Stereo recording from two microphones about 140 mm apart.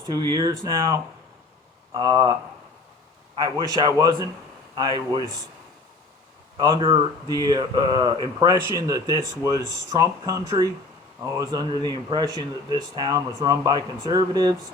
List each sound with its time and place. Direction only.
0.0 s speech: 30° right (ahead or behind)
3.5 s speech: 25° right (ahead or behind)
6.6 s speech: 25° right (ahead or behind)